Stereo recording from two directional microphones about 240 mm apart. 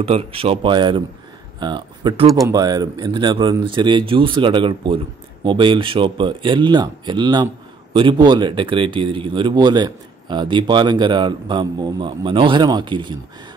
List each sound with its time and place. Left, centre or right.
0.0 s speech: right